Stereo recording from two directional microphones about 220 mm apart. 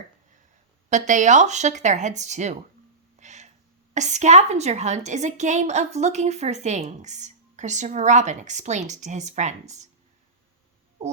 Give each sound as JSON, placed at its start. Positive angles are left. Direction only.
{"t": 0.9, "sound": "a woman's voice", "side_deg": -35}
{"t": 3.2, "sound": "a sound", "side_deg": -30}
{"t": 3.9, "sound": "a woman's voice", "side_deg": -30}